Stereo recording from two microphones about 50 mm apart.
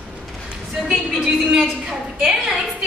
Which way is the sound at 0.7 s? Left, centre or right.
Centre.